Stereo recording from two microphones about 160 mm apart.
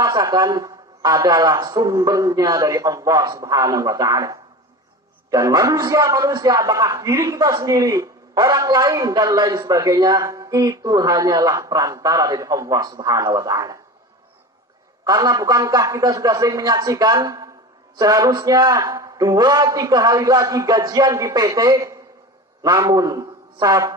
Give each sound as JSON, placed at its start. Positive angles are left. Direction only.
{"t": 0.0, "sound": "a man's voice", "side_deg": -20}
{"t": 15.0, "sound": "a man's voice", "side_deg": -25}